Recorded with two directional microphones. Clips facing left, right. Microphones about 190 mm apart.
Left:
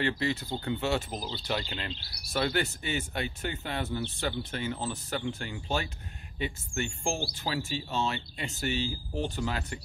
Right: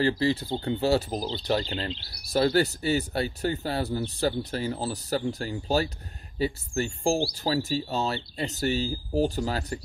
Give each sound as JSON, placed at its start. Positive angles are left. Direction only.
{"t": 0.0, "sound": "speech", "side_deg": -30}